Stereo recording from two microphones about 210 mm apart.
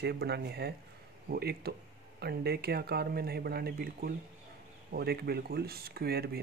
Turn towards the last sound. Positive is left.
turn(degrees=-50)  # may be behind; listen again after turning